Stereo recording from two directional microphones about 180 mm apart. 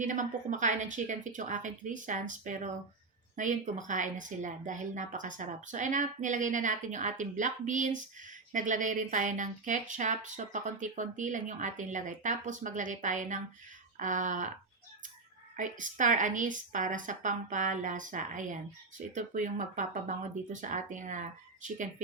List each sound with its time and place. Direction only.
0.0 s speech: 45° right (ahead or behind)
15.5 s speech: 45° right (ahead or behind)